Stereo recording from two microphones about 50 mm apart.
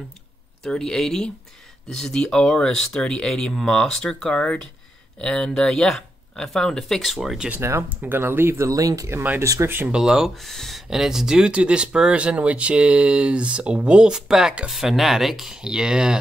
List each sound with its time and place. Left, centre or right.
0.7 s speech: centre
4.4 s speech: left
6.8 s speech: centre
7.4 s speech: centre
8.0 s speech: right
8.6 s speech: right
9.4 s speech: right
9.9 s speech: centre
10.4 s speech: centre
10.9 s speech: centre